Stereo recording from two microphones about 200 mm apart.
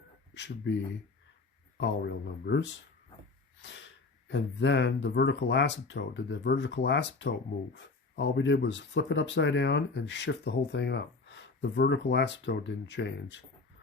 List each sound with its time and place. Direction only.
0.3 s speech: 65° left (ahead or behind)
1.8 s speech: 55° left (ahead or behind)